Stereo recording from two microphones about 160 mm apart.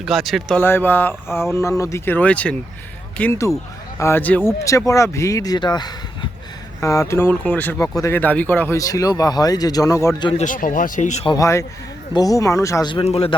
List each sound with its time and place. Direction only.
0.0 s speech: centre (ahead or behind)
0.6 s speech: 15° left (ahead or behind)
10.4 s speech: 55° left (ahead or behind)
11.3 s speech: 20° left (ahead or behind)
12.9 s speech: 35° left (ahead or behind)